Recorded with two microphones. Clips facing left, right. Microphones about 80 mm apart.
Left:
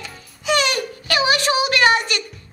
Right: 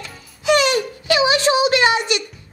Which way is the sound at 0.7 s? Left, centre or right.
Right.